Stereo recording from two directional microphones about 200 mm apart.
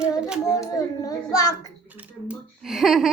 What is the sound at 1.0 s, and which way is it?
Speech, 15° left (ahead or behind).